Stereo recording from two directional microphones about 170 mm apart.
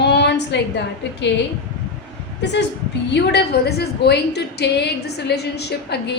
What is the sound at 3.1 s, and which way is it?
A woman's voice, 75° left (ahead or behind).